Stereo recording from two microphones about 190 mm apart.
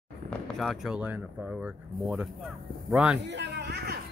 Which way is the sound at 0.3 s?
Centre (ahead or behind).